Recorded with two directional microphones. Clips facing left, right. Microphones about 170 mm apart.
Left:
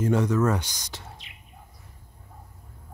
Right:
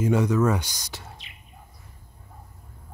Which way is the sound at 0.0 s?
10° right (ahead or behind).